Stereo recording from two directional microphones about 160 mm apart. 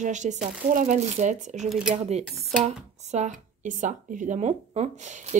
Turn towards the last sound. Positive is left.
turn(degrees=-45)  # may be behind; listen again after turning